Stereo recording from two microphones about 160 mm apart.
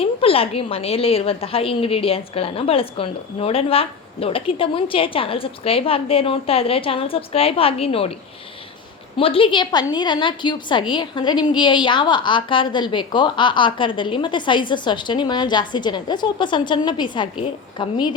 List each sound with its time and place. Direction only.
0.0 s a woman's voice: 35° left (ahead or behind)
9.1 s a woman's voice: 35° left (ahead or behind)